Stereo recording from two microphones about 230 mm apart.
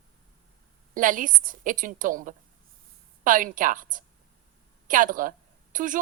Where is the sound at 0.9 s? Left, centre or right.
Right.